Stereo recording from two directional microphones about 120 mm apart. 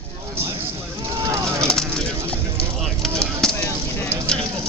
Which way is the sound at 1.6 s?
5° left (ahead or behind).